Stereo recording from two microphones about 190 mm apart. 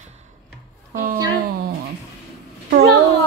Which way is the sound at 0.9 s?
50° right (ahead or behind).